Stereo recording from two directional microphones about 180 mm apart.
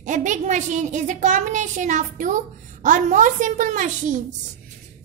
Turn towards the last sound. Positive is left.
turn(degrees=-45)  # may be behind; listen again after turning